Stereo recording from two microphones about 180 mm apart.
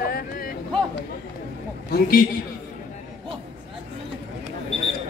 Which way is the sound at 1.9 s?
55° left (ahead or behind).